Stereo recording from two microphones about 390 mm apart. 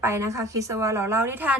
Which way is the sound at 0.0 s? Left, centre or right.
Centre.